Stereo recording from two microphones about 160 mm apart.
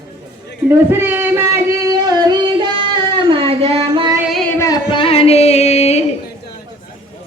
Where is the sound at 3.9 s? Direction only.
30° right (ahead or behind).